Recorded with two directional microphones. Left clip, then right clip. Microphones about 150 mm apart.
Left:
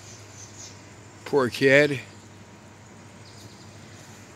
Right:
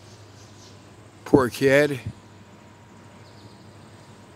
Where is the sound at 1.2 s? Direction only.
15° right (ahead or behind).